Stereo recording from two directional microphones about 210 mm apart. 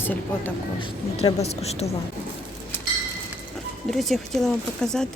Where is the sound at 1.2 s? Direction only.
30° left (ahead or behind).